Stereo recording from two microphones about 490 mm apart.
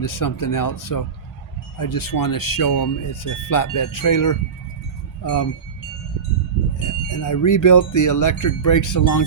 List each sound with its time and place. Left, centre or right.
0.0 s speech: left
7.1 s speech: left